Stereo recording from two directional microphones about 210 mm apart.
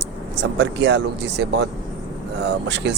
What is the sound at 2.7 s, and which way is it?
Speech, 55° right (ahead or behind).